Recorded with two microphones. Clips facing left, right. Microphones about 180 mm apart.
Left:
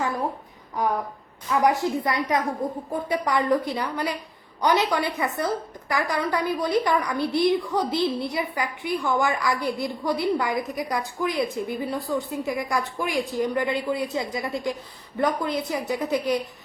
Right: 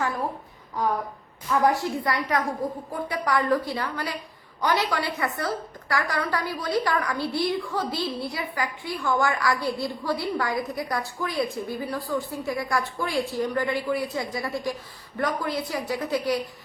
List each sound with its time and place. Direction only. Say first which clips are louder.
1.5 s a woman's voice: left 1 dB; 15° left (ahead or behind)